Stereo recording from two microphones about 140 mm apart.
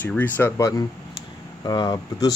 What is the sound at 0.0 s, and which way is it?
Speech, 10° left (ahead or behind).